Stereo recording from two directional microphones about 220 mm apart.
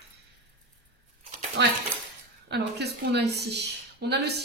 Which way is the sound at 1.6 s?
50° right (ahead or behind).